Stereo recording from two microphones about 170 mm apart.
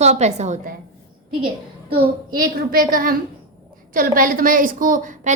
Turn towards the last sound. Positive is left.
turn(degrees=-50)  # may be behind; listen again after turning